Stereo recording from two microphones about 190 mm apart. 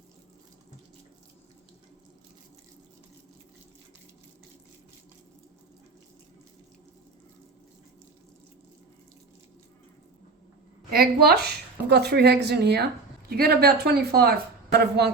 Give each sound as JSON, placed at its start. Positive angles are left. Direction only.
{"t": 10.9, "sound": "speech", "side_deg": -55}